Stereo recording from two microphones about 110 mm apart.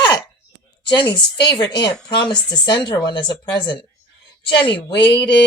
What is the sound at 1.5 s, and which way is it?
Speech, 40° left (ahead or behind).